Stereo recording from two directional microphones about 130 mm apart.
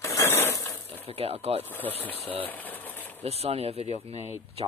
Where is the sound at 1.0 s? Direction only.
50° right (ahead or behind).